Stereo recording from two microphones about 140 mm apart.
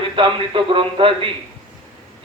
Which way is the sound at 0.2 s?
40° right (ahead or behind).